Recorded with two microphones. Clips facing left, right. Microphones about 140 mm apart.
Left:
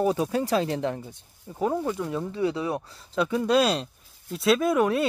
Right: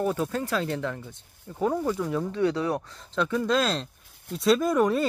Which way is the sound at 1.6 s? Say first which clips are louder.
Even; 5° left (ahead or behind).